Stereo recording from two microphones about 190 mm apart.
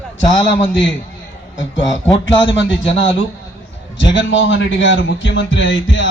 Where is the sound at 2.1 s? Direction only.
25° left (ahead or behind).